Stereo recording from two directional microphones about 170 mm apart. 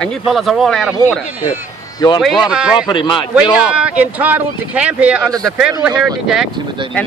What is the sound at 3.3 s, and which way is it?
Speech, 5° right (ahead or behind).